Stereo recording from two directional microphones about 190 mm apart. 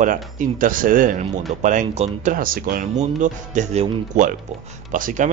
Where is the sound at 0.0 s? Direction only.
45° right (ahead or behind).